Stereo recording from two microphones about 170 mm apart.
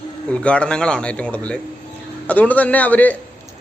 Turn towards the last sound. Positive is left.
turn(degrees=10)  # may be behind; listen again after turning